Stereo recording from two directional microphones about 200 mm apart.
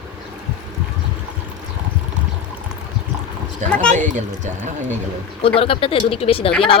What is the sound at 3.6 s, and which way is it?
Speech, 35° right (ahead or behind).